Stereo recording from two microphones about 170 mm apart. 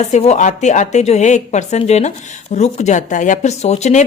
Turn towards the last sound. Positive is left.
turn(degrees=40)  # may be behind; listen again after turning